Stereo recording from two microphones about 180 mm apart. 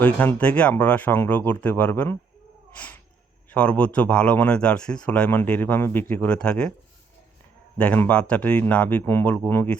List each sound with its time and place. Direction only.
0.0 s speech: 10° left (ahead or behind)
7.8 s speech: 10° left (ahead or behind)